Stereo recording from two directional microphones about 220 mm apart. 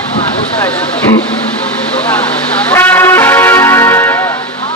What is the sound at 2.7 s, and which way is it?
Music, 10° left (ahead or behind).